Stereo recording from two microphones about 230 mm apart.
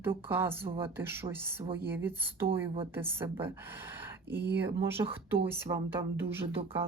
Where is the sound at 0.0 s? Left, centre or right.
Centre.